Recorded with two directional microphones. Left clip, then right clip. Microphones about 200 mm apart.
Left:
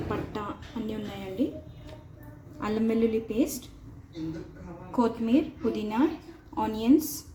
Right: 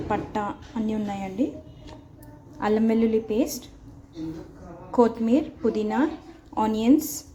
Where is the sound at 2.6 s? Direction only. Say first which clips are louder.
Right 4 dB; 30° right (ahead or behind).